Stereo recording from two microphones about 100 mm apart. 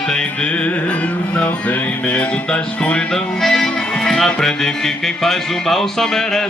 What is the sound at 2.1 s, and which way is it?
Music, 10° left (ahead or behind).